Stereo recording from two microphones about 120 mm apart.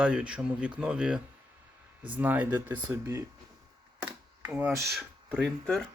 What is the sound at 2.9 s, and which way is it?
Speech, 25° right (ahead or behind).